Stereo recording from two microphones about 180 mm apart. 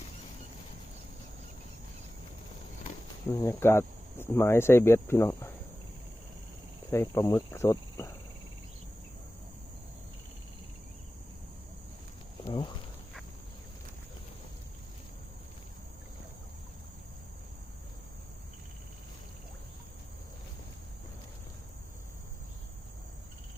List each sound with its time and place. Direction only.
3.4 s speech: 15° left (ahead or behind)
6.9 s speech: 15° left (ahead or behind)
12.5 s a sound: 25° left (ahead or behind)